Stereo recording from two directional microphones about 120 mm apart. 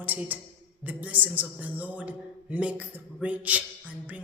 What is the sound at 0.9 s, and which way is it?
A man's voice, 15° right (ahead or behind).